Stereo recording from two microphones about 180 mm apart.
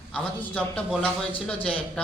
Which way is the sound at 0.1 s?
5° left (ahead or behind).